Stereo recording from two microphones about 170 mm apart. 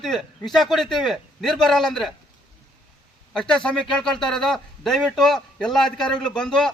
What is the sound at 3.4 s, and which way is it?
A man's voice, 5° left (ahead or behind).